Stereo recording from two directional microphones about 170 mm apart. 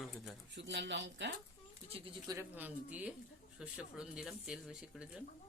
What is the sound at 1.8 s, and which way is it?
Speech, 35° right (ahead or behind).